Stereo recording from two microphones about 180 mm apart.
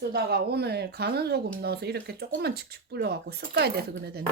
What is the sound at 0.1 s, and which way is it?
Speech, 60° right (ahead or behind).